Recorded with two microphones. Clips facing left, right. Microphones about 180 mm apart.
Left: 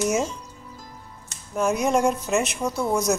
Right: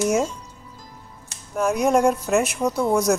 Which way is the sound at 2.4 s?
10° right (ahead or behind).